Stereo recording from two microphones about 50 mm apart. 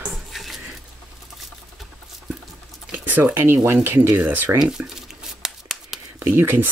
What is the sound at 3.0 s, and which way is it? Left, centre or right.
Speech, right.